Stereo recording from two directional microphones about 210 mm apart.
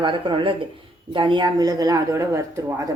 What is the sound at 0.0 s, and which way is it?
Speech, 25° right (ahead or behind).